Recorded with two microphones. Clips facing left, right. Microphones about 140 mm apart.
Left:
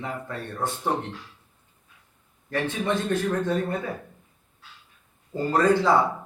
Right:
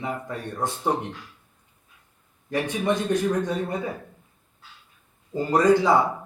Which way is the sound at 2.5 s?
15° right (ahead or behind).